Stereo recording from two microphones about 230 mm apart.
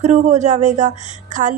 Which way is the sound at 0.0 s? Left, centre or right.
Right.